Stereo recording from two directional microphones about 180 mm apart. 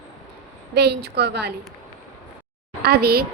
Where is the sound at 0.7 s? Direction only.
65° right (ahead or behind).